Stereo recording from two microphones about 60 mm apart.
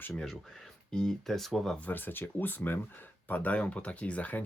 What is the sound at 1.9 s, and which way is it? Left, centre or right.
Speech, left.